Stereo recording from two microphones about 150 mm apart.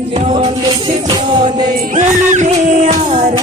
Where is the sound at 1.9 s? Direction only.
55° right (ahead or behind).